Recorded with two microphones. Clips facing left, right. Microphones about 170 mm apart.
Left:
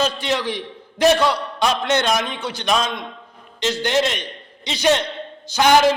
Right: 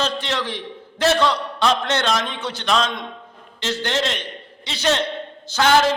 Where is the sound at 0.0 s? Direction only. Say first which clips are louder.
Left 3 dB; 10° left (ahead or behind).